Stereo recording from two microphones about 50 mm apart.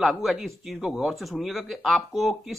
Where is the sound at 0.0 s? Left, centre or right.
Centre.